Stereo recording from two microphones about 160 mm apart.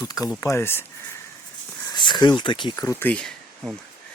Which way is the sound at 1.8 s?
25° left (ahead or behind).